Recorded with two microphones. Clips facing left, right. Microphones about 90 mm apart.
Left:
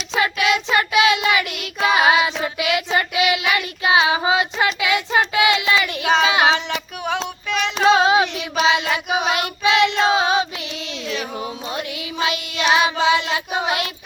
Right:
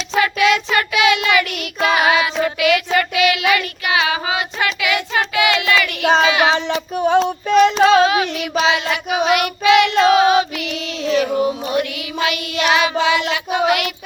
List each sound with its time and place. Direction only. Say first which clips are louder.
0.2 s child singing: right 4 dB; 25° left (ahead or behind)
4.6 s a sound: even; 25° left (ahead or behind)
6.0 s child singing: right 5 dB; 35° right (ahead or behind)
6.2 s child singing: right 1 dB; 25° left (ahead or behind)
6.9 s music: right 10 dB; 35° right (ahead or behind)
7.3 s child singing: right 11 dB; 40° right (ahead or behind)
7.9 s child singing: right 1 dB; 25° left (ahead or behind)
10.0 s choir: right 5 dB; 25° left (ahead or behind)
11.7 s child singing: right 7 dB; 25° left (ahead or behind)
13.0 s a sound: right 1 dB; 30° left (ahead or behind)